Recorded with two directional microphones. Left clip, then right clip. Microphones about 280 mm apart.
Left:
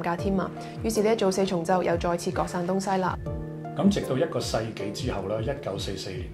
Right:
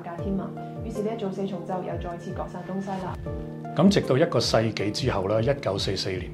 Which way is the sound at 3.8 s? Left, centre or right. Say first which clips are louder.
Right 4 dB; right.